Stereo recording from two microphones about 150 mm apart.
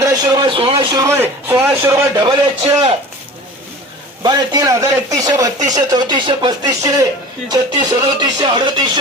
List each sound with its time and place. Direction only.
0.0 s a man's voice: 25° right (ahead or behind)
2.2 s a man's voice: 30° right (ahead or behind)
4.2 s a man's voice: 25° right (ahead or behind)